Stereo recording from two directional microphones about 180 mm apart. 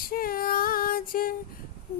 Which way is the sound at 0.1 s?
55° left (ahead or behind).